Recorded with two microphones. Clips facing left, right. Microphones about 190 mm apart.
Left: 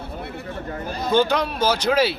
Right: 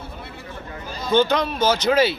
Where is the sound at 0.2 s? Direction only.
60° left (ahead or behind).